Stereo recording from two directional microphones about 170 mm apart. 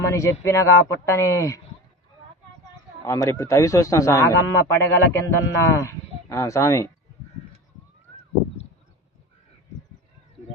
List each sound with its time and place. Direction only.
0.0 s a man's voice: 15° left (ahead or behind)
3.0 s a man's voice: 20° left (ahead or behind)